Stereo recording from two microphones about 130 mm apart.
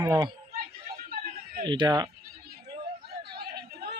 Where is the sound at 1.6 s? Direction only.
35° right (ahead or behind).